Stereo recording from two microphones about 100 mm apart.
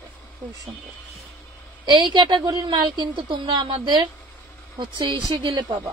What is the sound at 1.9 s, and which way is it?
Speech, 50° right (ahead or behind).